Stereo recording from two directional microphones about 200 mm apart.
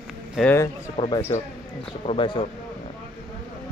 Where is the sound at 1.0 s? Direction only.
25° left (ahead or behind).